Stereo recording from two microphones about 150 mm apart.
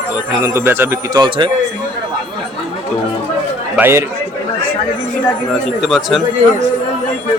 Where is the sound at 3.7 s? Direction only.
15° right (ahead or behind).